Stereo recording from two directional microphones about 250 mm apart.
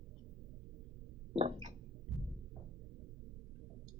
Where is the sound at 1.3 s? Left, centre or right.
Right.